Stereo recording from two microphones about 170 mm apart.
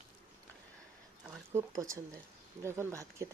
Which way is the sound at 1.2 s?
5° right (ahead or behind).